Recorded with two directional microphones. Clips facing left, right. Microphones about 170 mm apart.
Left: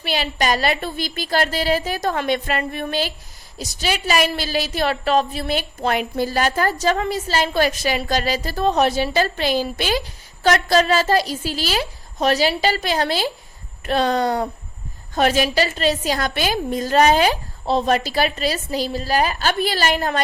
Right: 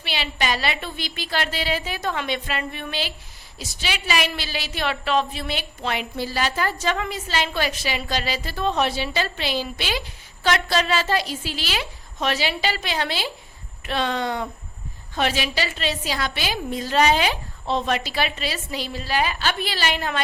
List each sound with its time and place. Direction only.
0.0 s a woman's voice: 45° left (ahead or behind)